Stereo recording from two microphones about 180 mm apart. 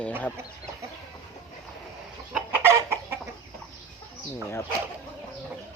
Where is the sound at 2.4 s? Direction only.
10° right (ahead or behind).